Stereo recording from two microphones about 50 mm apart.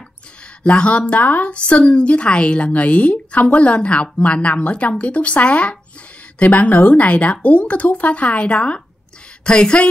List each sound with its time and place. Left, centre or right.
0.7 s a woman's voice: left